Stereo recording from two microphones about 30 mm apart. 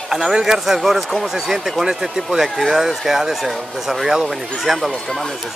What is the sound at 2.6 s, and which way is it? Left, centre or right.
Speech, centre.